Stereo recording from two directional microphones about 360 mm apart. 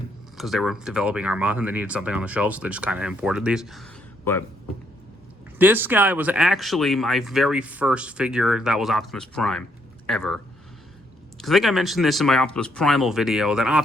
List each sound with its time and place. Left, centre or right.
0.3 s speech: centre
5.5 s speech: centre